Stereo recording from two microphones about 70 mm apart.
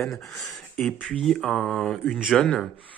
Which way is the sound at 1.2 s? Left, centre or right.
Centre.